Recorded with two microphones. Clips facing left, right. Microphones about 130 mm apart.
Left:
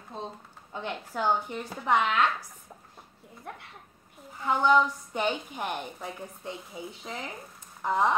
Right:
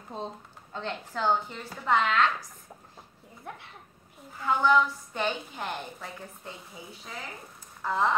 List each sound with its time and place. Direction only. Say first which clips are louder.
0.7 s a woman's voice: left 1 dB; 10° left (ahead or behind)
3.4 s a child's voice: even; centre (ahead or behind)
4.5 s a woman's voice: left 1 dB; 15° left (ahead or behind)